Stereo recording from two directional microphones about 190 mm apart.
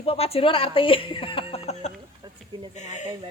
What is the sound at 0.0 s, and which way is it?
Speech, 30° left (ahead or behind).